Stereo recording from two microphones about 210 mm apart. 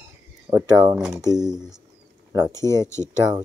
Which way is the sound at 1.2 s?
15° left (ahead or behind).